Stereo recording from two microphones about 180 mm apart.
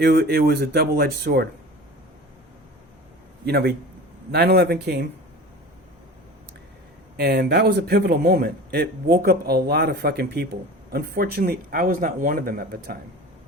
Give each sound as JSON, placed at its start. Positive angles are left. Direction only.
{"t": 0.0, "sound": "a man's voice", "side_deg": -60}
{"t": 3.4, "sound": "a man's voice", "side_deg": -60}
{"t": 7.2, "sound": "a man's voice", "side_deg": -60}